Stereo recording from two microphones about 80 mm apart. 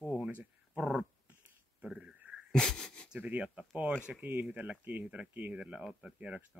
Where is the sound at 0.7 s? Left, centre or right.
Centre.